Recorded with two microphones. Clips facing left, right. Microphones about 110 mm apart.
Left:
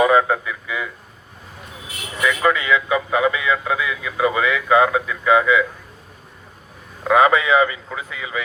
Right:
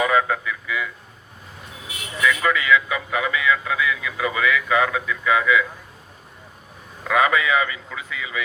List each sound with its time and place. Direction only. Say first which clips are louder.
0.0 s a sound: left 4 dB; 25° left (ahead or behind)
2.2 s vehicle: left 2 dB; 25° left (ahead or behind)
7.0 s speech: left 4 dB; 30° left (ahead or behind)